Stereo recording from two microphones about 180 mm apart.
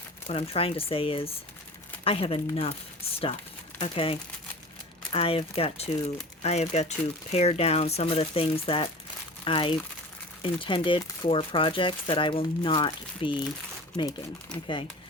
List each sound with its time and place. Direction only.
0.3 s speech: 30° left (ahead or behind)
3.8 s speech: 30° left (ahead or behind)
14.5 s speech: 5° left (ahead or behind)